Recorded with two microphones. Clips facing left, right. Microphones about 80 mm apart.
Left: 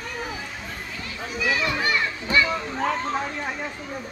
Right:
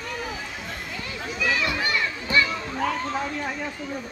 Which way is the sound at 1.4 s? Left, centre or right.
Centre.